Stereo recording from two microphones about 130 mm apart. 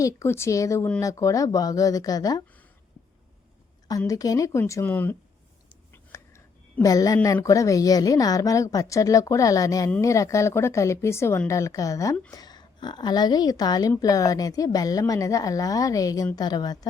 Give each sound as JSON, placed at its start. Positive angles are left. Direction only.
{"t": 0.0, "sound": "a woman's voice", "side_deg": 20}
{"t": 3.8, "sound": "a woman's voice", "side_deg": 25}
{"t": 5.9, "sound": "whispering", "side_deg": 20}
{"t": 6.8, "sound": "a woman's voice", "side_deg": 25}